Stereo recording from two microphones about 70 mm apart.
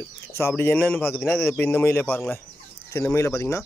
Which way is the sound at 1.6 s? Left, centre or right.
Left.